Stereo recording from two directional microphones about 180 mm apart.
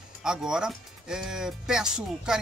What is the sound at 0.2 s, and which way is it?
Speech, 5° right (ahead or behind).